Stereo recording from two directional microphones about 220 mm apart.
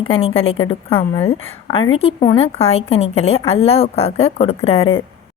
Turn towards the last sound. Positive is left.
turn(degrees=25)  # may be behind; listen again after turning